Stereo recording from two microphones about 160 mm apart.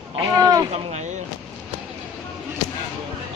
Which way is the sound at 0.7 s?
40° right (ahead or behind).